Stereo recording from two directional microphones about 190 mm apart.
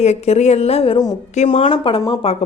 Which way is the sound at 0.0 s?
35° left (ahead or behind).